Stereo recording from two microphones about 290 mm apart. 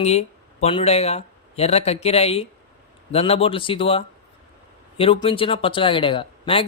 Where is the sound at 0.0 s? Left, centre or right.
Left.